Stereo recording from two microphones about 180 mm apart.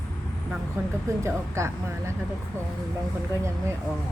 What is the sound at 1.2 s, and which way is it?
Speech, 15° right (ahead or behind).